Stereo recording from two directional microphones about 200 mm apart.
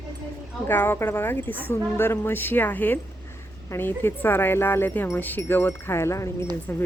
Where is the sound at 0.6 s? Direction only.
10° left (ahead or behind).